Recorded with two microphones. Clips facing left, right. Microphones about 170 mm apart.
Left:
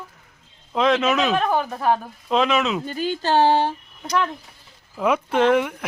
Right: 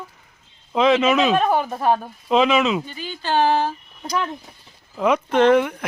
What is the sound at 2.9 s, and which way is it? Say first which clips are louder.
Speech: left 4 dB; 45° left (ahead or behind).